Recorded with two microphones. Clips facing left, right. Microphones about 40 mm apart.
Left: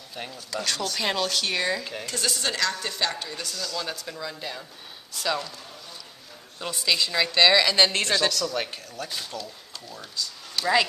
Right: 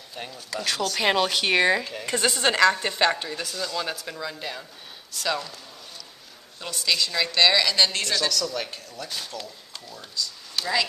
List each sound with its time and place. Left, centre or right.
0.1 s speech: centre
1.0 s a woman's voice: right
1.5 s a woman's voice: right; by 4.6 s centre
5.1 s speech: centre
6.6 s a woman's voice: centre
7.7 s a woman's voice: centre
9.8 s speech: centre